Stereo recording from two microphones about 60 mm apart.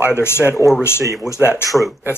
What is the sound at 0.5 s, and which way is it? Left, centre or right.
Speech, centre.